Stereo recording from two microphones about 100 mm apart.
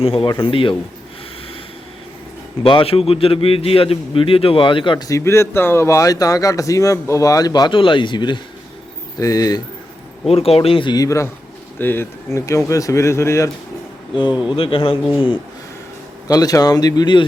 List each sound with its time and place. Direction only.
0.0 s a man's voice: 70° left (ahead or behind)
2.6 s a man's voice: 65° left (ahead or behind)
5.0 s speech: 30° left (ahead or behind)
7.7 s speech: 55° left (ahead or behind)
9.1 s speech: 35° left (ahead or behind)
10.2 s a man's voice: 85° left; by 10.9 s 65° left (ahead or behind)
10.9 s speech: 35° left (ahead or behind)
11.8 s speech: 20° left (ahead or behind)
14.5 s speech: 65° left (ahead or behind)
16.2 s speech: 40° left (ahead or behind)